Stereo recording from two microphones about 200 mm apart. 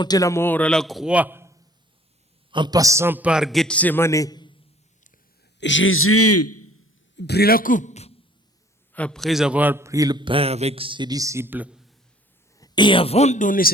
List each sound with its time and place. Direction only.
0.0 s a man's voice: 20° left (ahead or behind)
5.5 s speech: 65° left (ahead or behind); by 6.1 s 90° left
7.2 s a man's voice: 55° left (ahead or behind); by 8.1 s 35° left (ahead or behind)
8.9 s a man's voice: 5° left (ahead or behind)
12.5 s speech: 20° left (ahead or behind); by 13.7 s 45° left (ahead or behind)